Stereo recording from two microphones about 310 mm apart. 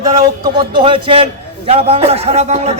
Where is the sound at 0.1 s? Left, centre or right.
Centre.